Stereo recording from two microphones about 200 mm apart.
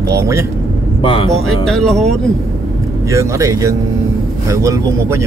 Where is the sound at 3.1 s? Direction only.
15° right (ahead or behind).